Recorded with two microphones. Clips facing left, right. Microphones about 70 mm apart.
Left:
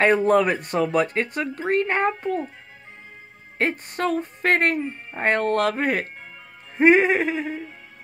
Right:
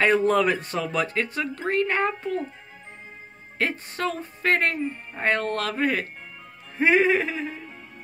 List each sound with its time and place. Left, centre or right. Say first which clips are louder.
0.0 s speech: left 2 dB; left
3.5 s speech: left 3 dB; left
6.8 s music: left 3 dB; left